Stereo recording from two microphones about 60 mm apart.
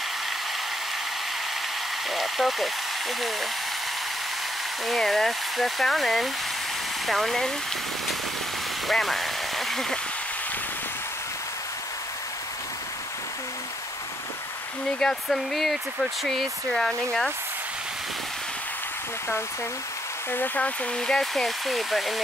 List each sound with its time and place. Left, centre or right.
2.0 s speech: centre
4.8 s speech: centre
8.8 s speech: centre
15.0 s speech: centre
20.2 s speech: left
21.1 s speech: centre